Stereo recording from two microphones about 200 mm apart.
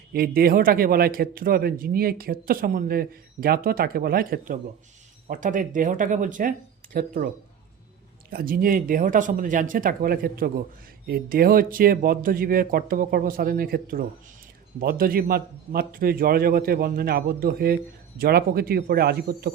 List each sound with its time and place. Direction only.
0.1 s a man's voice: 50° right (ahead or behind)
8.3 s a man's voice: 45° right (ahead or behind)